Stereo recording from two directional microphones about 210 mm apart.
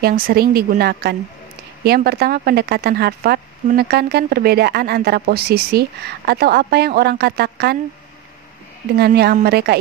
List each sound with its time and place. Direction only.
0.0 s speech: 45° right (ahead or behind)
8.9 s speech: 50° right (ahead or behind)